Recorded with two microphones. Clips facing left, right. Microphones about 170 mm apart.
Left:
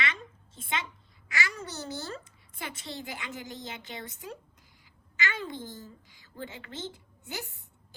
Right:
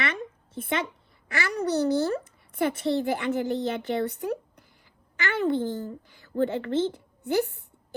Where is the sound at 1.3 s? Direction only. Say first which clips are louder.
Right 9 dB; 55° right (ahead or behind).